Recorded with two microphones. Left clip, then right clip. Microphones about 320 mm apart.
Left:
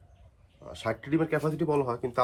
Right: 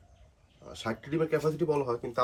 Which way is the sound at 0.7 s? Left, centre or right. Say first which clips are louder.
Left 5 dB; centre.